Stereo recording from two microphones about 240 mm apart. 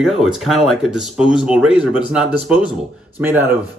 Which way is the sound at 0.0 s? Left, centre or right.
Centre.